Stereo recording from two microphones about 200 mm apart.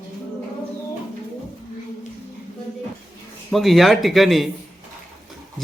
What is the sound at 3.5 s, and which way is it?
Speech, centre (ahead or behind).